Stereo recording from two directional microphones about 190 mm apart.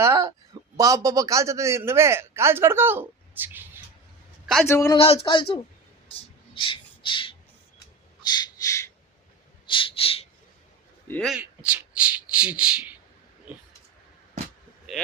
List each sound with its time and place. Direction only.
0.0 s a man's voice: 15° right (ahead or behind)
4.6 s speech: 15° left (ahead or behind)
4.9 s a sound: 30° left (ahead or behind)
8.3 s crow: 15° left (ahead or behind)
9.6 s a sound: 25° left (ahead or behind)
11.1 s a man's voice: centre (ahead or behind)